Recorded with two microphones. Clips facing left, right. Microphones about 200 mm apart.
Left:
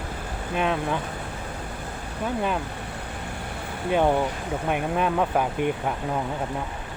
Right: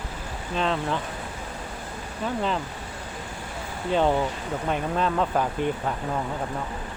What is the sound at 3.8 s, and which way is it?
Speech, 10° left (ahead or behind).